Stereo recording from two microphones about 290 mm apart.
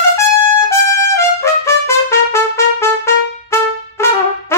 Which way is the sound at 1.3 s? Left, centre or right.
Centre.